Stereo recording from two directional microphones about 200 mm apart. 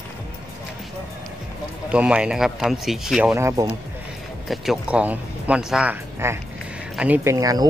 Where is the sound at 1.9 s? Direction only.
5° right (ahead or behind).